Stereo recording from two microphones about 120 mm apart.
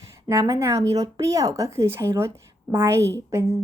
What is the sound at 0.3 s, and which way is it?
Speech, 30° right (ahead or behind).